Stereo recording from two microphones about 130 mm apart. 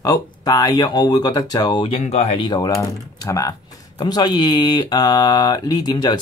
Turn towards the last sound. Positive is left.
turn(degrees=30)  # may be behind; listen again after turning